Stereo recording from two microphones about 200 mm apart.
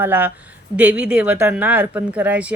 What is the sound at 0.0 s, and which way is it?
Speech, 10° right (ahead or behind).